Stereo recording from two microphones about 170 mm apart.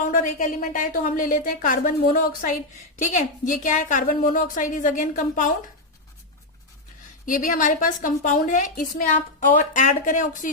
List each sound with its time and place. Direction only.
0.0 s a woman's voice: 50° left (ahead or behind)
7.3 s a woman's voice: 50° left (ahead or behind)